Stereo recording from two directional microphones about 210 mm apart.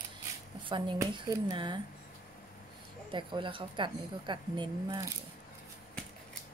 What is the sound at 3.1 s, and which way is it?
A woman's voice, 25° right (ahead or behind).